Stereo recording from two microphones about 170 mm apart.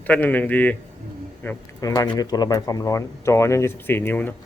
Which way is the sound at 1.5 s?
20° left (ahead or behind).